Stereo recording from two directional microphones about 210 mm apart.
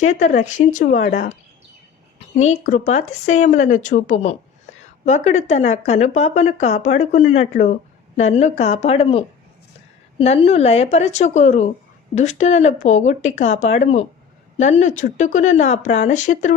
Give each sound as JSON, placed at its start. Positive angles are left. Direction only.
{"t": 0.0, "sound": "speech", "side_deg": 35}
{"t": 2.3, "sound": "speech", "side_deg": 35}